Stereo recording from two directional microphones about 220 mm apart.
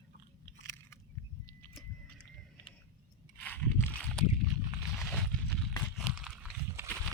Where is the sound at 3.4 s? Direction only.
5° left (ahead or behind).